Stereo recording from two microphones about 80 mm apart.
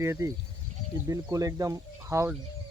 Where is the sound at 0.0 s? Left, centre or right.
Right.